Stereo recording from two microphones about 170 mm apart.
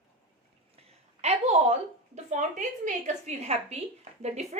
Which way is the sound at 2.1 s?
45° right (ahead or behind).